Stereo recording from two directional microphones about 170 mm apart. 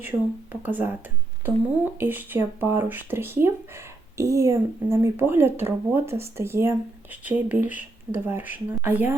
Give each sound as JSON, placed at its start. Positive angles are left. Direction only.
{"t": 0.5, "sound": "speech", "side_deg": -10}